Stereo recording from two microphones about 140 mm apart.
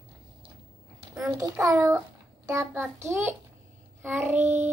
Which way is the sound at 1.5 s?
20° right (ahead or behind).